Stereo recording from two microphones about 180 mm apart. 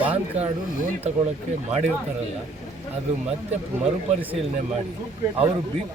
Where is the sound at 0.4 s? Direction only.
35° right (ahead or behind).